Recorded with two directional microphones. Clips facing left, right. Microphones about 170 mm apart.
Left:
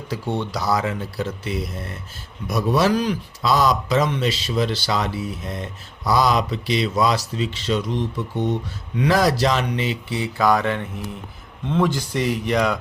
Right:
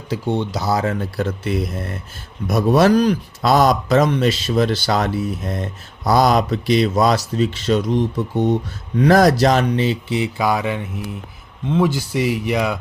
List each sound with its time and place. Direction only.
0.1 s speech: 25° right (ahead or behind)
0.9 s speech: 55° right (ahead or behind); by 10.0 s 35° right (ahead or behind)
10.1 s speech: 20° right (ahead or behind)
10.4 s speech: 10° right (ahead or behind)